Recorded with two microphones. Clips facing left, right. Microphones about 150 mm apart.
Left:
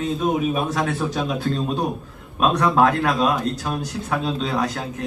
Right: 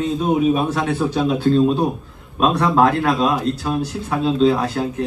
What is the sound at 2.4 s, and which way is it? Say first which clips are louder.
A man's voice: right 2 dB; 30° right (ahead or behind).